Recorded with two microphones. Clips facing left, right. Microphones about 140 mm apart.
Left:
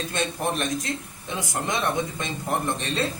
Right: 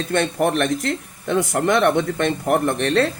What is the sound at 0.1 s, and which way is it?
Speech, 65° right (ahead or behind).